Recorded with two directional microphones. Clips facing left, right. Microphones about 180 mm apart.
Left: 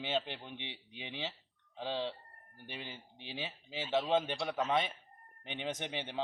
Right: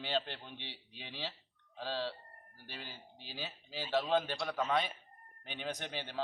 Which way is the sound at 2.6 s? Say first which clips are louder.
Left 3 dB; 20° left (ahead or behind).